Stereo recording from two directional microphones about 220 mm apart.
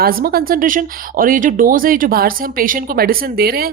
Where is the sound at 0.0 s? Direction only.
40° right (ahead or behind).